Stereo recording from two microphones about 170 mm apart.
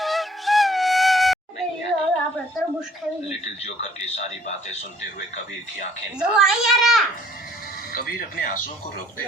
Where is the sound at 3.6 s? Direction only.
40° left (ahead or behind).